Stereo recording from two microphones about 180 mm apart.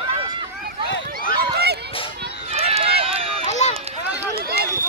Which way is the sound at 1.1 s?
65° right (ahead or behind).